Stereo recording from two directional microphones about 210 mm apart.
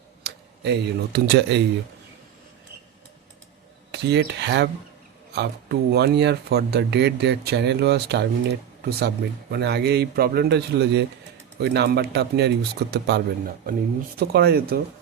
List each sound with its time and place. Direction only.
0.2 s speech: 55° right (ahead or behind)
3.9 s speech: 55° right (ahead or behind)